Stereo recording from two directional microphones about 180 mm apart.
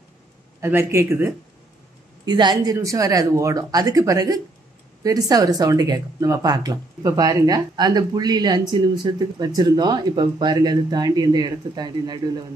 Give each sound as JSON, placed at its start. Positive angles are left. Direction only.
{"t": 0.6, "sound": "a man's voice", "side_deg": -15}
{"t": 2.2, "sound": "speech", "side_deg": -25}